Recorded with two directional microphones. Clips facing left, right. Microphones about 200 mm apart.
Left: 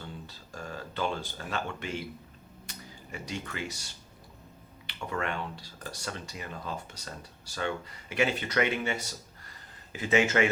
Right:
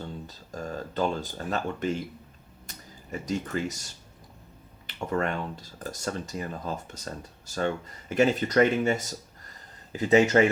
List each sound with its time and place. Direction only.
0.0 s a sound: 40° right (ahead or behind)
2.6 s speech: 40° right (ahead or behind)
4.9 s speech: 40° right (ahead or behind)